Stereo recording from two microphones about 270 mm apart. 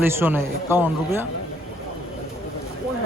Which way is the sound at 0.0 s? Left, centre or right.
Centre.